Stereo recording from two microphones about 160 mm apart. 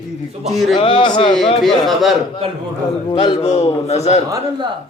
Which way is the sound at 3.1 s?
30° left (ahead or behind).